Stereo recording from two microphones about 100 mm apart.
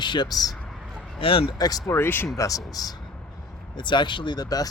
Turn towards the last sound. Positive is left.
turn(degrees=40)  # may be behind; listen again after turning